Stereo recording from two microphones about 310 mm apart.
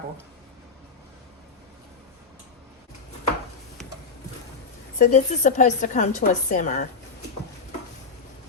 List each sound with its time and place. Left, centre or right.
4.9 s a woman's voice: left